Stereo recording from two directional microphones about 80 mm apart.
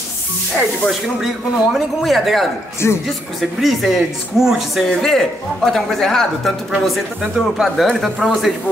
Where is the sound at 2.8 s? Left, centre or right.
Left.